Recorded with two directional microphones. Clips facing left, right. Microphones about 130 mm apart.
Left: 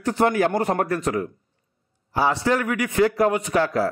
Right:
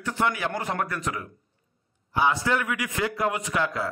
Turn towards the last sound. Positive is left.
turn(degrees=35)  # may be behind; listen again after turning